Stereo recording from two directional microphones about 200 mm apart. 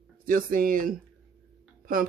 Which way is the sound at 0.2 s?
45° right (ahead or behind).